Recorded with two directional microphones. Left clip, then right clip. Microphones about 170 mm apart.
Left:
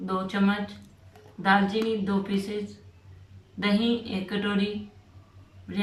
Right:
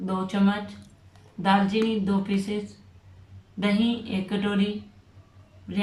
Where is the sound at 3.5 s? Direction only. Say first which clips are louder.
Even; 10° right (ahead or behind).